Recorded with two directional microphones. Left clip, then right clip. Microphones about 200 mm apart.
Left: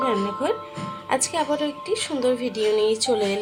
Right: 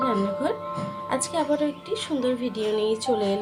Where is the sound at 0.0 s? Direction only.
5° left (ahead or behind).